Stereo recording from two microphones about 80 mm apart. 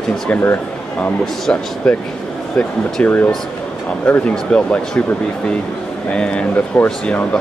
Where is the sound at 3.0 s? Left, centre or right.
Left.